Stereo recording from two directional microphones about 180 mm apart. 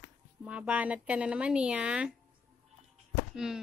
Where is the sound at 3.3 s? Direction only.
5° right (ahead or behind).